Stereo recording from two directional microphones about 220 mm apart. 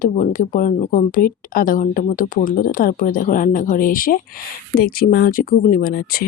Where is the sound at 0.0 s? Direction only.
35° left (ahead or behind).